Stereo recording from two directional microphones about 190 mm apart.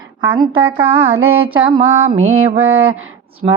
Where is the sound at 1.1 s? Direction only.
90° right.